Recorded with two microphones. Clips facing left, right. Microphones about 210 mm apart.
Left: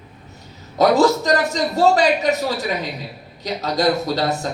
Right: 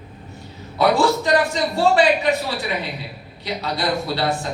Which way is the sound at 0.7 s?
40° left (ahead or behind).